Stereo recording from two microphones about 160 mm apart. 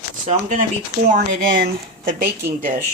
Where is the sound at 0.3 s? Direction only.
50° right (ahead or behind).